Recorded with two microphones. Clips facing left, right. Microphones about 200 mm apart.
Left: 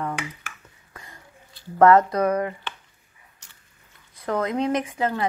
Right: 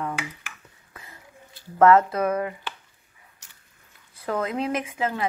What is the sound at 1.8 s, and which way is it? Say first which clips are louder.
Speech: left 1 dB; 5° right (ahead or behind).